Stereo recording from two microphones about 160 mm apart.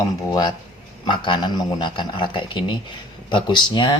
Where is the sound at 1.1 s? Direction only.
30° left (ahead or behind).